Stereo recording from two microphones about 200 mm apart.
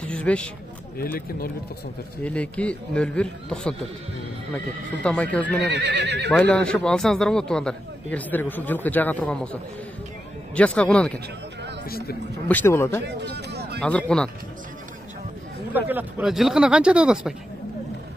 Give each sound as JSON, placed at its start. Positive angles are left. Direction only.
{"t": 0.1, "sound": "speech", "side_deg": 5}
{"t": 0.9, "sound": "speech", "side_deg": 45}
{"t": 2.2, "sound": "a man's voice", "side_deg": 5}
{"t": 5.0, "sound": "speech", "side_deg": 5}
{"t": 5.6, "sound": "speech", "side_deg": -60}
{"t": 6.3, "sound": "a man's voice", "side_deg": 5}
{"t": 12.4, "sound": "a man's voice", "side_deg": 10}
{"t": 13.0, "sound": "speech", "side_deg": -60}
{"t": 13.7, "sound": "speech", "side_deg": 5}
{"t": 15.7, "sound": "speech", "side_deg": -10}